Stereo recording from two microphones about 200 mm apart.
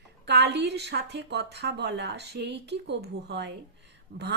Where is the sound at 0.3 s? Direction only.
55° right (ahead or behind).